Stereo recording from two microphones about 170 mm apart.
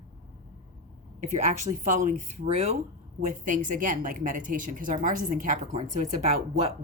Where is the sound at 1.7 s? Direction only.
45° right (ahead or behind).